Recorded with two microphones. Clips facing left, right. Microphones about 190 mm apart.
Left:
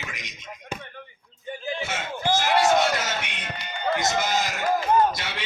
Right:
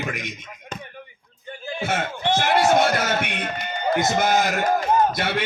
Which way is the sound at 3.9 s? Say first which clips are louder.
Right 5 dB; 55° right (ahead or behind).